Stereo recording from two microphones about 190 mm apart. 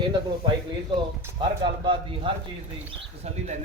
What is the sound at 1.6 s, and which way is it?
Speech, 25° right (ahead or behind).